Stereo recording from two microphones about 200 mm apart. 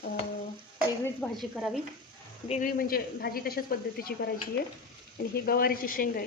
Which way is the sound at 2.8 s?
45° left (ahead or behind).